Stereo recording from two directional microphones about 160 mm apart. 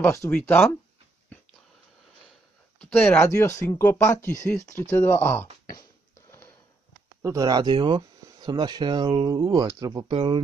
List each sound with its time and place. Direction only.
0.1 s speech: 15° left (ahead or behind)
2.8 s speech: 10° left (ahead or behind)
7.2 s speech: 20° right (ahead or behind)